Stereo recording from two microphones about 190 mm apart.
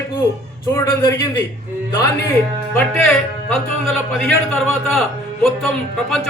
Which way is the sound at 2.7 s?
5° left (ahead or behind).